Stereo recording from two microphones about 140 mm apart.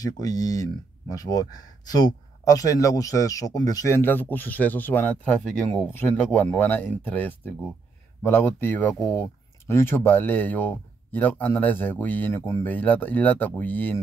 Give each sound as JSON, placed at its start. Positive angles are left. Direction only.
{"t": 0.0, "sound": "speech", "side_deg": 25}